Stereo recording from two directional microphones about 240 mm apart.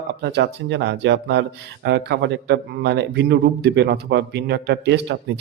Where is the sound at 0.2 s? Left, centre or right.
Right.